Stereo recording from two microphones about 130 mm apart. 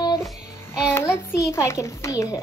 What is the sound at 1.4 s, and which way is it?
Speech, 25° left (ahead or behind).